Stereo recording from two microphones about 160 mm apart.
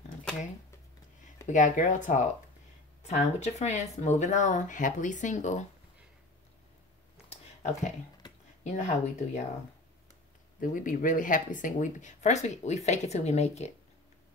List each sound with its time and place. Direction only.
1.5 s speech: 50° left (ahead or behind)
7.2 s a sound: 45° left (ahead or behind)
8.6 s speech: 50° left (ahead or behind)
10.6 s speech: 55° left (ahead or behind)